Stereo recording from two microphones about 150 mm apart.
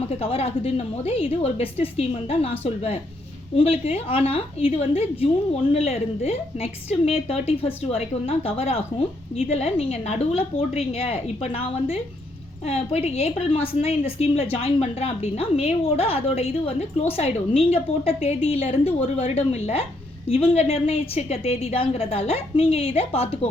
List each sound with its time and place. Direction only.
0.1 s a woman's voice: 40° left (ahead or behind)